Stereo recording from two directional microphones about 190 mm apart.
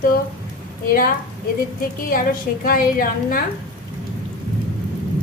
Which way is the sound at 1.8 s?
50° left (ahead or behind).